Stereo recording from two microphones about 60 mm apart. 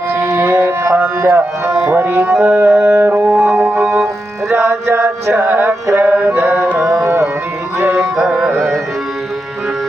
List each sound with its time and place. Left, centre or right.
0.1 s music: right
2.3 s music: centre
2.6 s music: right
4.7 s chant: right
5.5 s music: right
6.4 s music: right
6.7 s music: right
7.8 s music: right
8.4 s carnatic music: centre